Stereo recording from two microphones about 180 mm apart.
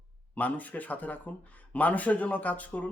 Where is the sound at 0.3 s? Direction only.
10° left (ahead or behind).